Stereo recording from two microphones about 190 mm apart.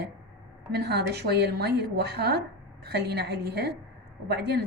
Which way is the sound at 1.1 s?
60° right (ahead or behind).